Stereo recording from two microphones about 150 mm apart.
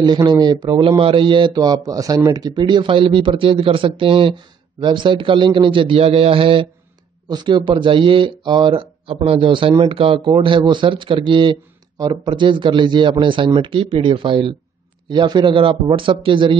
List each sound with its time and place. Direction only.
0.0 s speech: 30° right (ahead or behind)